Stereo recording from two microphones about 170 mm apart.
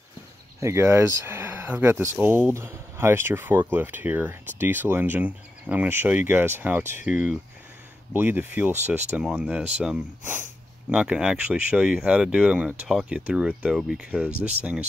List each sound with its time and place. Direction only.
0.6 s speech: 15° right (ahead or behind)
7.0 s speech: 50° left (ahead or behind)
8.1 s speech: 10° right (ahead or behind)